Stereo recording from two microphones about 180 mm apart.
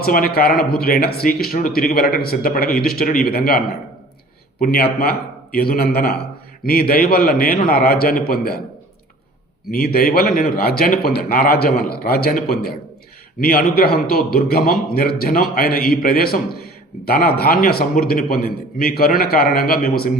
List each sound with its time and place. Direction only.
0.0 s a man's voice: 55° left (ahead or behind)
4.6 s a man's voice: 55° left (ahead or behind)
9.7 s a man's voice: 55° left (ahead or behind)